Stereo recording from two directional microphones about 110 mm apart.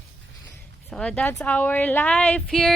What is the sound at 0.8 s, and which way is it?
Speech, 10° left (ahead or behind).